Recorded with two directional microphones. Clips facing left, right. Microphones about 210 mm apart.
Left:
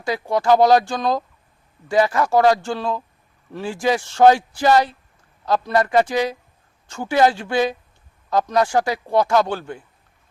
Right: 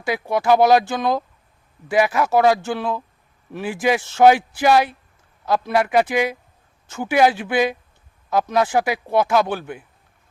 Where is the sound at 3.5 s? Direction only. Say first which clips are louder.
Right 1 dB; 15° right (ahead or behind).